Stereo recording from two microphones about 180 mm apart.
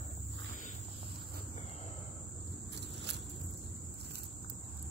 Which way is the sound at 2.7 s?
70° right (ahead or behind).